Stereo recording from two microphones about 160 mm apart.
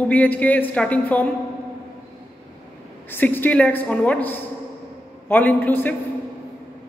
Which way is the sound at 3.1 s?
10° left (ahead or behind).